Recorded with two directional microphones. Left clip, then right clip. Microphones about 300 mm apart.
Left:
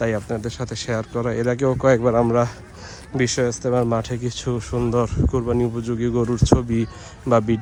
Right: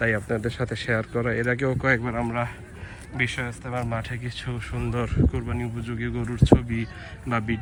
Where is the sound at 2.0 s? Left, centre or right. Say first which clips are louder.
Left 11 dB; right.